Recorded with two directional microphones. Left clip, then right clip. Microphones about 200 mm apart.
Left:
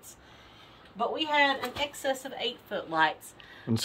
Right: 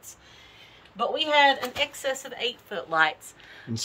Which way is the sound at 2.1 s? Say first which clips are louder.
Right 2 dB; 5° left (ahead or behind).